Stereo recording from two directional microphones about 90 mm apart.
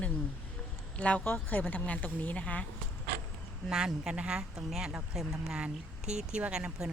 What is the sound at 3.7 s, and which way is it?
Speech, 5° right (ahead or behind).